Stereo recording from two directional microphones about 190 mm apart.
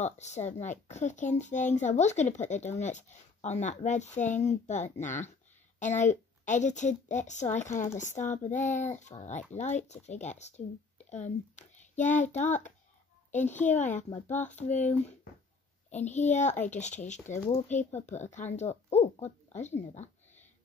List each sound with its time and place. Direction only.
0.0 s a woman's voice: 35° left (ahead or behind)
15.9 s speech: 35° left (ahead or behind)